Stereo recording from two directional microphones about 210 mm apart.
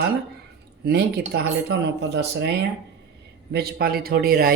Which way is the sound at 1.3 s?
50° right (ahead or behind).